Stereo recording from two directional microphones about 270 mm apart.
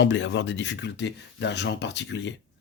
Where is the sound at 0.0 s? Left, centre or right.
Left.